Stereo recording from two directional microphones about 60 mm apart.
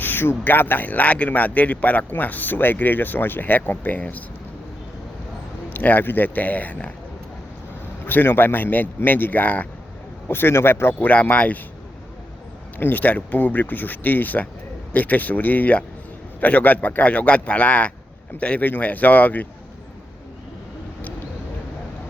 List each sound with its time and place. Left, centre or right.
0.0 s speech: left
5.7 s speech: left
8.0 s speech: left
10.2 s speech: left
11.1 s speech: left
12.8 s speech: left